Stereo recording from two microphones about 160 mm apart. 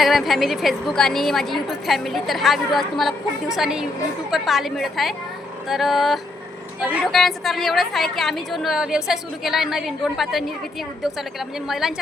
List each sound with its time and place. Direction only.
0.0 s a woman's voice: centre (ahead or behind)